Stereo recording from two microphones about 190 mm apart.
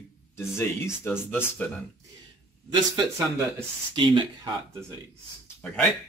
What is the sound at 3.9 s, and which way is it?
Speech, 25° right (ahead or behind).